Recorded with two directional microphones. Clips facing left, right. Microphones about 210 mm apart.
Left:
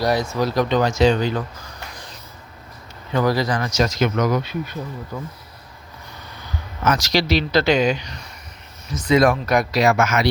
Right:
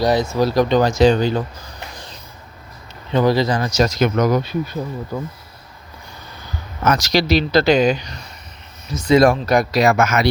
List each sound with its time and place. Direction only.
0.0 s speech: 20° right (ahead or behind)
0.3 s speech: 35° right (ahead or behind)
3.1 s speech: 25° right (ahead or behind)
6.8 s speech: 45° right (ahead or behind)